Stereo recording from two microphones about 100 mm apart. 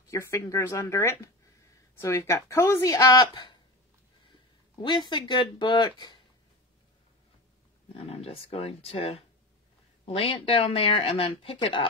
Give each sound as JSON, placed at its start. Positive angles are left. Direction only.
{"t": 0.1, "sound": "a woman's voice", "side_deg": 30}
{"t": 4.8, "sound": "speech", "side_deg": 50}
{"t": 7.9, "sound": "speech", "side_deg": 80}